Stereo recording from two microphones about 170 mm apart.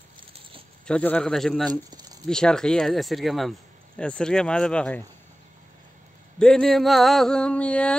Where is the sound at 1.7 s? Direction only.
25° right (ahead or behind).